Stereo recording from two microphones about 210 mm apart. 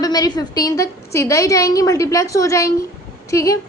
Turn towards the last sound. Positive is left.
turn(degrees=15)  # may be behind; listen again after turning